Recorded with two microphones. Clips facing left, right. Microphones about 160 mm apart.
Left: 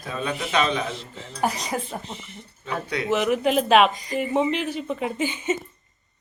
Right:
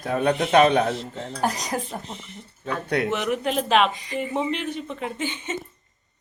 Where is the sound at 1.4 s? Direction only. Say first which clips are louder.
Left 1 dB; centre (ahead or behind).